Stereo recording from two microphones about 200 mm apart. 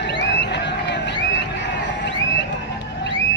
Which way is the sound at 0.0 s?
60° left (ahead or behind).